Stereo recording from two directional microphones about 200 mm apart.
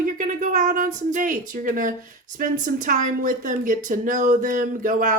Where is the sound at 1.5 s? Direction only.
40° right (ahead or behind).